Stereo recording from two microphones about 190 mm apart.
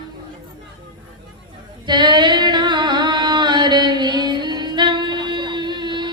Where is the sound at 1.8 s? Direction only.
25° right (ahead or behind).